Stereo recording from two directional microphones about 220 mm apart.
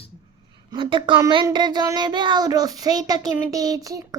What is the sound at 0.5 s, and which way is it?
Speech, 20° right (ahead or behind).